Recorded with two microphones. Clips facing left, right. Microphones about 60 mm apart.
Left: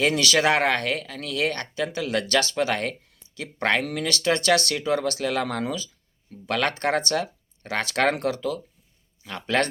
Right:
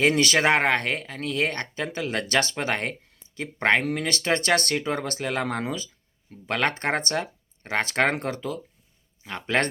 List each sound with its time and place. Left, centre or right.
0.0 s speech: right